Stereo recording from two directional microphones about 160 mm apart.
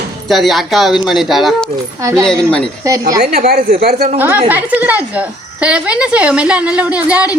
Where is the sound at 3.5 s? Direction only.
65° right (ahead or behind).